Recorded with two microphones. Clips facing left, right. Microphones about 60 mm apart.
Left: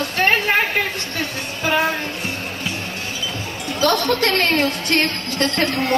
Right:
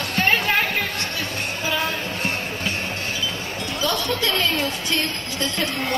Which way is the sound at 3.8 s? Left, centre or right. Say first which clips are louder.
Left 6 dB; left.